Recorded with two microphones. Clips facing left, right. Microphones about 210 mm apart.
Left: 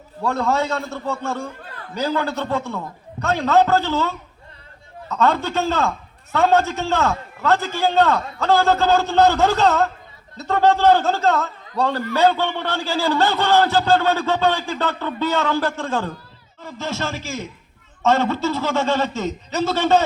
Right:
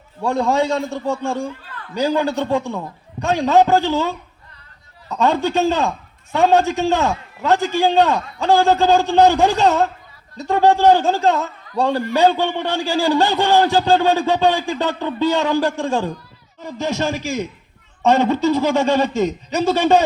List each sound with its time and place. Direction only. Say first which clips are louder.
0.2 s a man's voice: right 3 dB; 15° right (ahead or behind)